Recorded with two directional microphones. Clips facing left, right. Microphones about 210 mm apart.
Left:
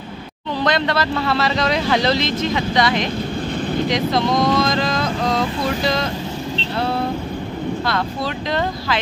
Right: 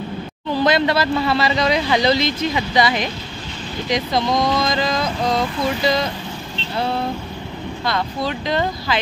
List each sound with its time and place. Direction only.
0.6 s speech: 5° right (ahead or behind)
7.8 s speech: centre (ahead or behind)